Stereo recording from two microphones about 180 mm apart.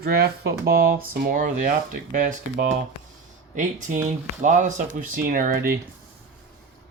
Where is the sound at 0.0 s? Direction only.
65° right (ahead or behind).